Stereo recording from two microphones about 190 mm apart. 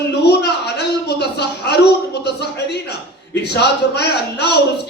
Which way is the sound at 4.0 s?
60° left (ahead or behind).